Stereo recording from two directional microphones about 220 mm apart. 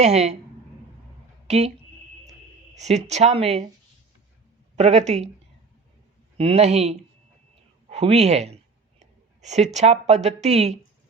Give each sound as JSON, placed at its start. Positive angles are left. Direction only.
{"t": 0.0, "sound": "speech", "side_deg": -30}
{"t": 1.5, "sound": "speech", "side_deg": -30}
{"t": 2.7, "sound": "speech", "side_deg": -30}
{"t": 4.8, "sound": "speech", "side_deg": -30}
{"t": 6.3, "sound": "speech", "side_deg": -25}
{"t": 7.9, "sound": "a sound", "side_deg": -30}
{"t": 8.2, "sound": "speech", "side_deg": -30}